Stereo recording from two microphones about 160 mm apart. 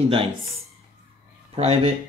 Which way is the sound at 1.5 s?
40° right (ahead or behind).